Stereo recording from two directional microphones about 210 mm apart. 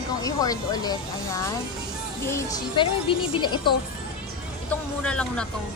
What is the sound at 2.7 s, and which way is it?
A woman's voice, 25° left (ahead or behind).